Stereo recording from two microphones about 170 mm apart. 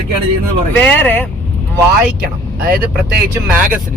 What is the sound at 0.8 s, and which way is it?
Speech, 10° left (ahead or behind).